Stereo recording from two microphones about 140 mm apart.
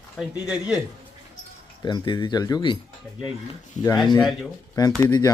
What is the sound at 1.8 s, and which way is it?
Speech, 30° left (ahead or behind).